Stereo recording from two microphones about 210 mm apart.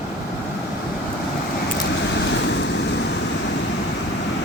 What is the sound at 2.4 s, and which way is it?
Vehicle, 55° left (ahead or behind).